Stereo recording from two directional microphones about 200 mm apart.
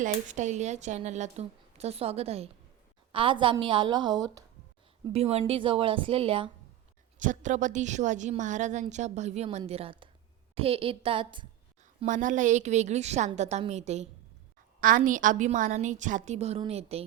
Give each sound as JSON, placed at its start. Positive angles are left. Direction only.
{"t": 0.0, "sound": "a woman's voice", "side_deg": -35}
{"t": 7.2, "sound": "a woman's voice", "side_deg": -40}
{"t": 11.9, "sound": "a woman's voice", "side_deg": -40}